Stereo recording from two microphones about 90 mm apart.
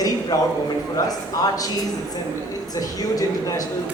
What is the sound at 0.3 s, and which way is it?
A man's voice, 40° left (ahead or behind).